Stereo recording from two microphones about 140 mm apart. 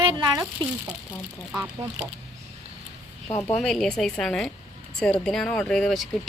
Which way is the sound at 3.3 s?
25° left (ahead or behind).